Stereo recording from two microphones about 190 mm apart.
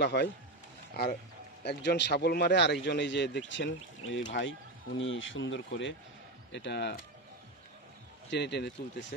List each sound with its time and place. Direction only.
0.0 s a man's voice: 60° left (ahead or behind); by 5.6 s 85° left
6.5 s speech: 65° left (ahead or behind)
8.3 s speech: 65° left (ahead or behind)